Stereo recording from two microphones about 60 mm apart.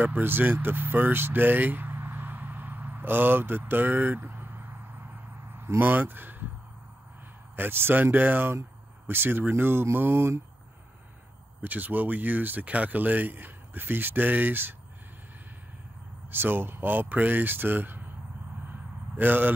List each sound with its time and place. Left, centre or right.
0.0 s speech: right
7.5 s speech: right
11.6 s speech: right
16.3 s speech: right
19.1 s speech: right